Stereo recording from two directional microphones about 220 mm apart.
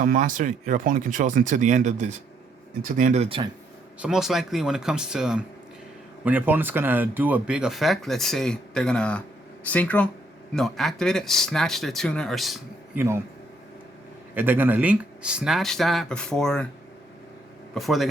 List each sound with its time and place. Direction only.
0.0 s speech: 35° right (ahead or behind)
4.0 s speech: centre (ahead or behind)
14.3 s speech: 10° right (ahead or behind)
17.7 s speech: centre (ahead or behind)